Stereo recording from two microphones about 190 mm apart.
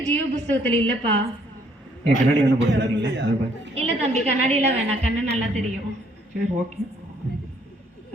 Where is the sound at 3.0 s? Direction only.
70° right (ahead or behind).